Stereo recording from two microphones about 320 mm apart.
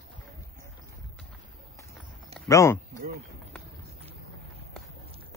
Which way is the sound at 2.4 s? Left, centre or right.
Centre.